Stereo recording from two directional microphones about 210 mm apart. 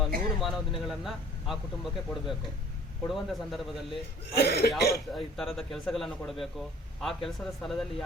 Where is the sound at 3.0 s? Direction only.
Centre (ahead or behind).